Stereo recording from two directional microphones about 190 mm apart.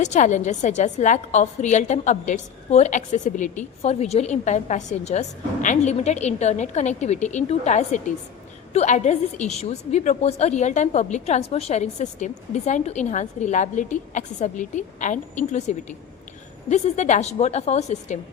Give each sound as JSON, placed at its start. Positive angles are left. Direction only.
{"t": 0.0, "sound": "a woman's voice", "side_deg": 40}